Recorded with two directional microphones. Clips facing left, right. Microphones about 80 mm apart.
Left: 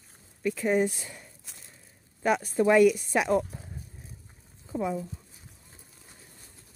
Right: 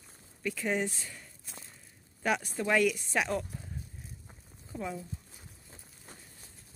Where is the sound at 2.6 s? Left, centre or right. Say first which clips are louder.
Left 8 dB; centre.